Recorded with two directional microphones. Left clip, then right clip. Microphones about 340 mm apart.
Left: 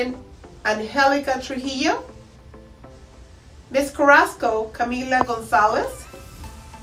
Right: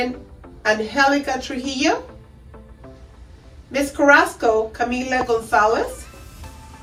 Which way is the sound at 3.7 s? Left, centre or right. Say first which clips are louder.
Right 1 dB; centre.